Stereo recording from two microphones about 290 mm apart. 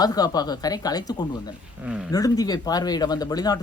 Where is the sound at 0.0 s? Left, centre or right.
Centre.